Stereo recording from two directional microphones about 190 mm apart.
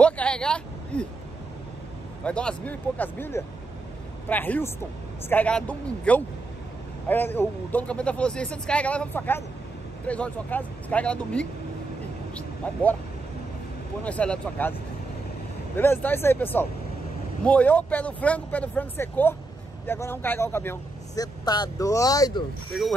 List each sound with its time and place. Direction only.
0.0 s vehicle: 5° left (ahead or behind)
2.2 s speech: 5° left (ahead or behind)
12.6 s speech: 5° left (ahead or behind)
14.0 s speech: 5° left (ahead or behind)
22.7 s speech: centre (ahead or behind)